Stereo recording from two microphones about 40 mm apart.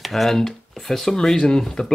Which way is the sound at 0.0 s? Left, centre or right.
Centre.